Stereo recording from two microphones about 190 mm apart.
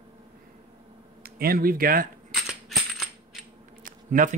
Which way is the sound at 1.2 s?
50° right (ahead or behind).